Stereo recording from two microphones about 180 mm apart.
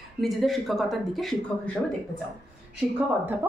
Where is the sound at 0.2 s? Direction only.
Centre (ahead or behind).